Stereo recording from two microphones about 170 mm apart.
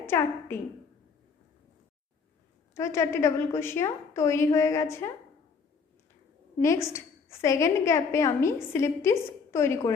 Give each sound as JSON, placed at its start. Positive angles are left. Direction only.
{"t": 0.0, "sound": "a woman's voice", "side_deg": 15}
{"t": 2.7, "sound": "a woman's voice", "side_deg": 15}
{"t": 6.6, "sound": "a woman's voice", "side_deg": 15}